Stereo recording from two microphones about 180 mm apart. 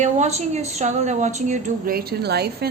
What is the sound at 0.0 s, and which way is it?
A woman's voice, 40° right (ahead or behind).